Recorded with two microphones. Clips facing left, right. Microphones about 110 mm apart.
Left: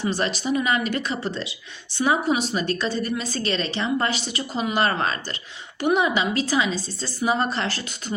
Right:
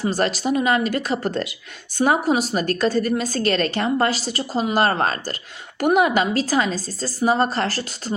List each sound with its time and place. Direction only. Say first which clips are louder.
0.0 s a woman's voice: right 3 dB; 45° right (ahead or behind)